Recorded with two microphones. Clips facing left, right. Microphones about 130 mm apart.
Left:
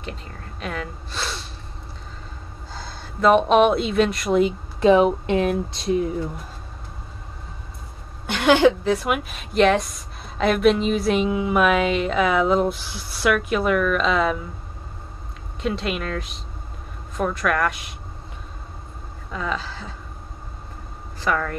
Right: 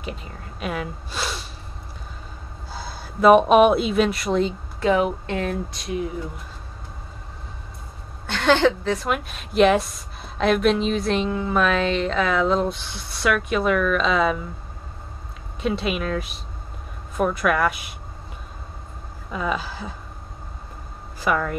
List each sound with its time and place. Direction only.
0.0 s speech: 10° right (ahead or behind)
2.7 s speech: 10° right (ahead or behind)
4.4 s speech: 15° left (ahead or behind)
8.3 s a woman's voice: 10° left (ahead or behind)
15.6 s a woman's voice: centre (ahead or behind)
19.3 s speech: 10° right (ahead or behind)
21.2 s speech: 10° right (ahead or behind)